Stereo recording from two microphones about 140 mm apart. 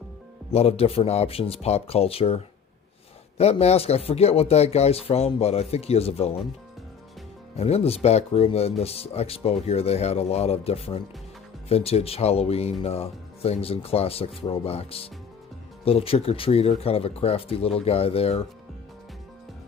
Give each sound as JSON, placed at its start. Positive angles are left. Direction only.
{"t": 0.5, "sound": "speech", "side_deg": 45}
{"t": 7.5, "sound": "speech", "side_deg": 50}